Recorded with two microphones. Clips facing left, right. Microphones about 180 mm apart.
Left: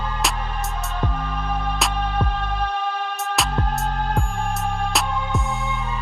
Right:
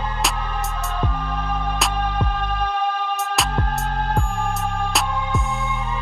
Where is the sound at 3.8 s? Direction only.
15° left (ahead or behind).